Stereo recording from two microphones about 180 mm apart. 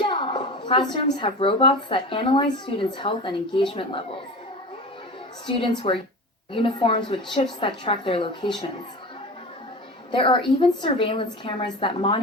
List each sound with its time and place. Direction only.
0.0 s a woman's voice: 30° left (ahead or behind)
5.5 s a woman's voice: 25° left (ahead or behind)
10.1 s a woman's voice: 30° left (ahead or behind)